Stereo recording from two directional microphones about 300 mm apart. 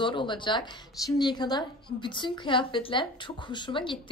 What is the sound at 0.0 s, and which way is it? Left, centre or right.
A woman's voice, centre.